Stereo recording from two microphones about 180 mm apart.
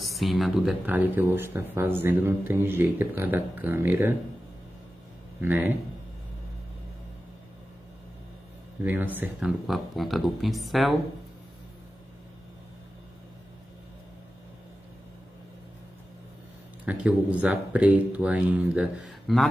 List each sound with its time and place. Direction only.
0.0 s speech: centre (ahead or behind)
5.4 s speech: 10° right (ahead or behind)
8.8 s speech: 10° right (ahead or behind)
16.8 s speech: 5° right (ahead or behind)